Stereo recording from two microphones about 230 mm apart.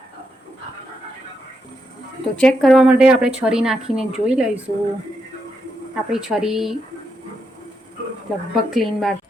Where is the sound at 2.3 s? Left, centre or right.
Centre.